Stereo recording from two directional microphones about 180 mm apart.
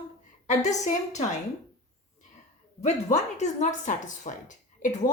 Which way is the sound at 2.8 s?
40° left (ahead or behind).